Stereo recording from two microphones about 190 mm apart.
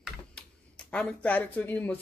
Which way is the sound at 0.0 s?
5° left (ahead or behind).